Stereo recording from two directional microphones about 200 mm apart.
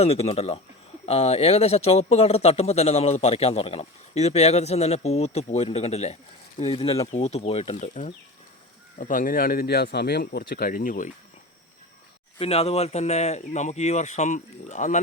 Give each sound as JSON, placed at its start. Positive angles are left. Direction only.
{"t": 0.0, "sound": "speech", "side_deg": 30}
{"t": 12.4, "sound": "speech", "side_deg": 30}